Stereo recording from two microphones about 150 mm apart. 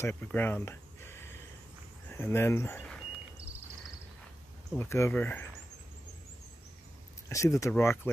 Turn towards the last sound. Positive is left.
turn(degrees=15)  # may be behind; listen again after turning